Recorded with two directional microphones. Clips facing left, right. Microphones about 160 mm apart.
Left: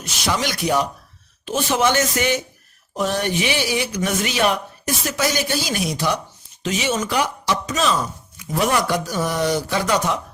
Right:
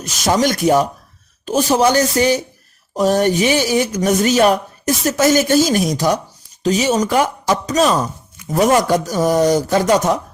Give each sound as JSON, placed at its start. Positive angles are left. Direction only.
{"t": 0.0, "sound": "speech", "side_deg": -40}